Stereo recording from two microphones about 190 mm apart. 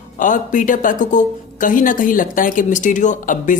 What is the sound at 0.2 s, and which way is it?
Speech, 45° left (ahead or behind).